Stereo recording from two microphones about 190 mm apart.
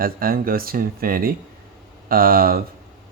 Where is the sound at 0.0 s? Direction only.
50° right (ahead or behind).